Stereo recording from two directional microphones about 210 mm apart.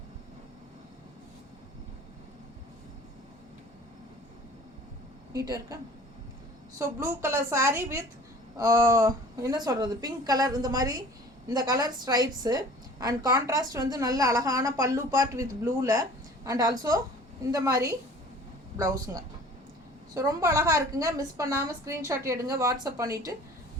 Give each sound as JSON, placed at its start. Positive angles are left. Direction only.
{"t": 5.3, "sound": "a woman's voice", "side_deg": -15}